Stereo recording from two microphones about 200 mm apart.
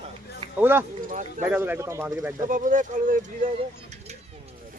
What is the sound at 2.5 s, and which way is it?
Speech, 40° right (ahead or behind).